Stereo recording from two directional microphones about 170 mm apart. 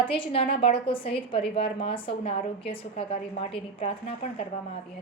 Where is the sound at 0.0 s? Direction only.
30° left (ahead or behind).